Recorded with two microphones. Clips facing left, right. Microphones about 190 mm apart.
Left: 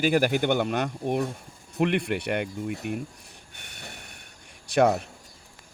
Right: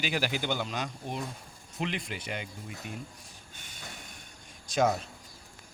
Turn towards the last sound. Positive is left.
turn(degrees=65)  # may be behind; listen again after turning